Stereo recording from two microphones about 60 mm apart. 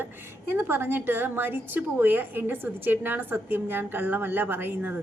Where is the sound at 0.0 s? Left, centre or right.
Right.